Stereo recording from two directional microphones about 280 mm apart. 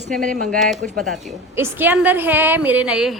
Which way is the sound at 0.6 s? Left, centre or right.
Centre.